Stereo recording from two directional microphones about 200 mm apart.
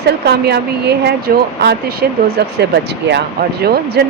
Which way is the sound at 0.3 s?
55° right (ahead or behind).